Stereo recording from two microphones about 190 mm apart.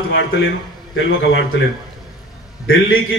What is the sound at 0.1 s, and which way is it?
A man's voice, 85° left.